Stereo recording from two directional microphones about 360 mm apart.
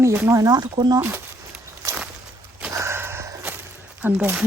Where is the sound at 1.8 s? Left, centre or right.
Centre.